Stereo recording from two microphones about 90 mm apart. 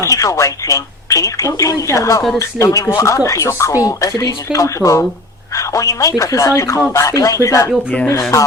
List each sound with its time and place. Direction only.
0.0 s a woman's voice: 35° left (ahead or behind)